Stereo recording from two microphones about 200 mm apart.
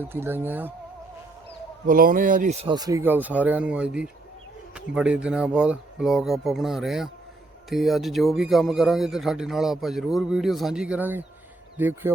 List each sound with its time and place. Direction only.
0.0 s speech: 10° right (ahead or behind)
1.9 s speech: 45° right (ahead or behind)
2.7 s a man's voice: 15° right (ahead or behind)